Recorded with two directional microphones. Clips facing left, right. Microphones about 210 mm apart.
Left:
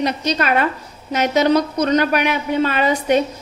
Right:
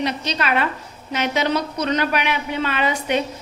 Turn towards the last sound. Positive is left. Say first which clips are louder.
# left 5 dB
turn(degrees=40)  # may be behind; listen again after turning